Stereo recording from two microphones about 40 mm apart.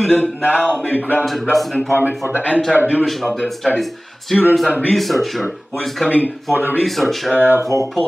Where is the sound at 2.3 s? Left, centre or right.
Right.